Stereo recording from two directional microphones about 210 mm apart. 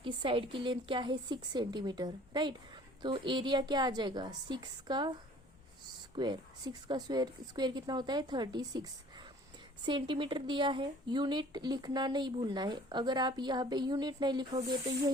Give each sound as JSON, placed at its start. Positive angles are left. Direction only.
{"t": 0.0, "sound": "a woman's voice", "side_deg": -25}
{"t": 6.1, "sound": "a woman's voice", "side_deg": -20}